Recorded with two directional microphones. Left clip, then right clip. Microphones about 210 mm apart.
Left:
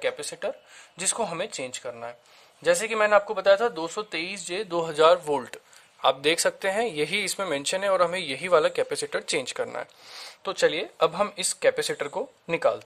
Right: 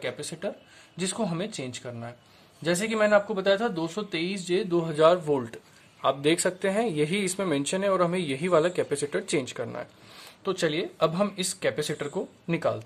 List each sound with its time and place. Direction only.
0.0 s speech: 35° left (ahead or behind)